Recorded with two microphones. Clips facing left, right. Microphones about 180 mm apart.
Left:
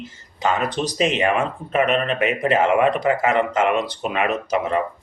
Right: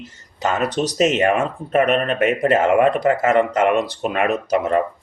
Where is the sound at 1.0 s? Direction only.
45° right (ahead or behind).